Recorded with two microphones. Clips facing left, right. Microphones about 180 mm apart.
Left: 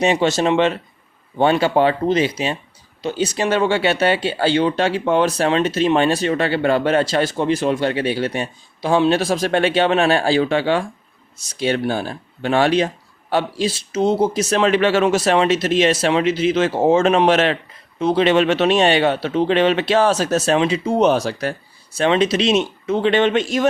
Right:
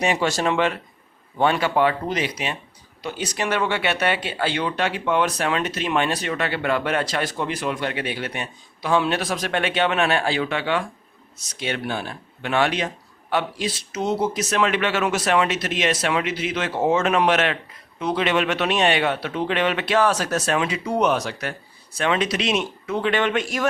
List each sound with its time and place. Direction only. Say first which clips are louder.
0.0 s speech: left 5 dB; 25° left (ahead or behind)